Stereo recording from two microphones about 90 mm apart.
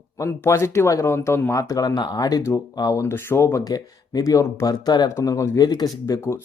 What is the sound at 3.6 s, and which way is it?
Speech, 45° left (ahead or behind).